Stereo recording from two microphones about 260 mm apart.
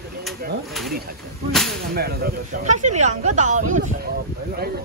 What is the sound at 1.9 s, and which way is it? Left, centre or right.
Speech, right.